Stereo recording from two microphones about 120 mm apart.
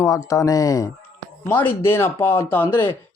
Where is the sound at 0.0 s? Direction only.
25° left (ahead or behind).